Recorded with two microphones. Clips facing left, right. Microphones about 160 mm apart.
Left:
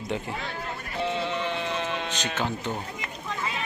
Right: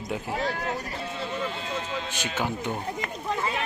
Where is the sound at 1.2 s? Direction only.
75° left (ahead or behind).